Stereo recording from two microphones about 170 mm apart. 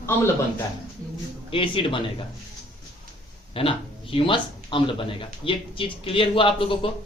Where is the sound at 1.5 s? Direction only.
30° left (ahead or behind).